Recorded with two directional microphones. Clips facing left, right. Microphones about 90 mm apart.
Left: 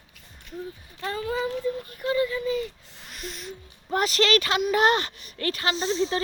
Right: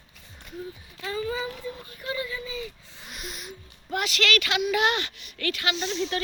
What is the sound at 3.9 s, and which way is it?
A woman's voice, 35° left (ahead or behind).